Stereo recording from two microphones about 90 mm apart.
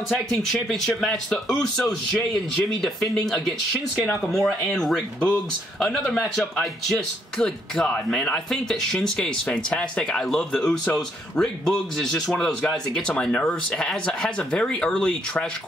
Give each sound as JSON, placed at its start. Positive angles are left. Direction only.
{"t": 0.1, "sound": "speech", "side_deg": 5}